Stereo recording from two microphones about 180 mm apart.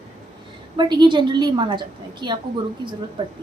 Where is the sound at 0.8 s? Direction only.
25° right (ahead or behind).